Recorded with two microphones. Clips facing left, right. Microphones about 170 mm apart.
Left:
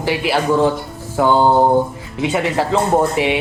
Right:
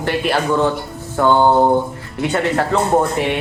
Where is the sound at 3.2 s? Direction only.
80° left.